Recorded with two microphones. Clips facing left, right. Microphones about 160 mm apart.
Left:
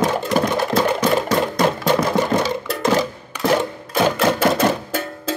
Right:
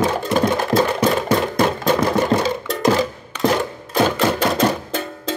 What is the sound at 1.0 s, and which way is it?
Music, 30° right (ahead or behind).